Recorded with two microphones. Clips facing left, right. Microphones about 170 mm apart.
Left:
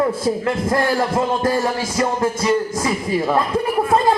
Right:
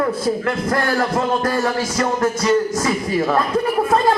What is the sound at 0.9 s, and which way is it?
Music, 10° left (ahead or behind).